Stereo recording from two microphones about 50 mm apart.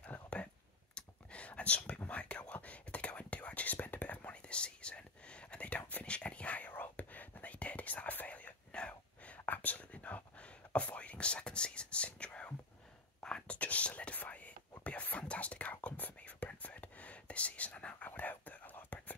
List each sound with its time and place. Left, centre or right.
0.3 s a sound: left
0.9 s whispering: left
6.7 s whispering: left